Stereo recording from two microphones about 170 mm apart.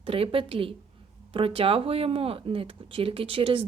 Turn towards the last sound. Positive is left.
turn(degrees=-30)  # may be behind; listen again after turning